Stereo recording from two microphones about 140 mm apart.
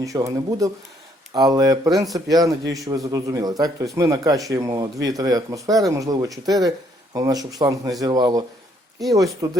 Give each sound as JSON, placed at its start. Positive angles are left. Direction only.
{"t": 0.0, "sound": "speech", "side_deg": -25}